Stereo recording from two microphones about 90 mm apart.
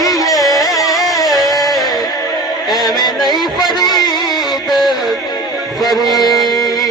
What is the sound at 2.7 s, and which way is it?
Music, 50° left (ahead or behind).